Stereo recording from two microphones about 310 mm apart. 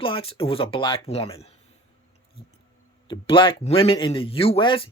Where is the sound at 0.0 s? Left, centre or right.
Centre.